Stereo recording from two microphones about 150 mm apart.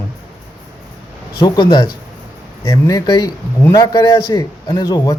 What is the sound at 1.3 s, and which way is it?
A man's voice, 25° left (ahead or behind).